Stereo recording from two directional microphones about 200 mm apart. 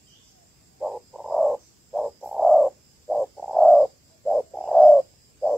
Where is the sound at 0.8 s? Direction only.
Centre (ahead or behind).